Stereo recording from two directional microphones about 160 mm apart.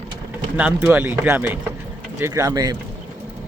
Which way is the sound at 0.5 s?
10° right (ahead or behind).